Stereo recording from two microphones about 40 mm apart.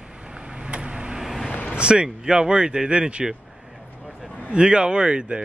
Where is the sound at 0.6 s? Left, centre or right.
Right.